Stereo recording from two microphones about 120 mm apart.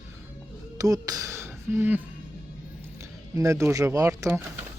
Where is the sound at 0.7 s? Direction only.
30° right (ahead or behind).